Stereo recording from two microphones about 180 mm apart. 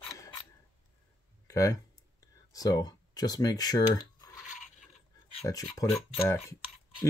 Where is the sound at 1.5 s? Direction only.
15° left (ahead or behind).